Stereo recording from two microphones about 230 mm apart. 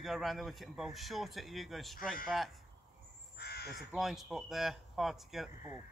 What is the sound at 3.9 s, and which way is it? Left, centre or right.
Speech, centre.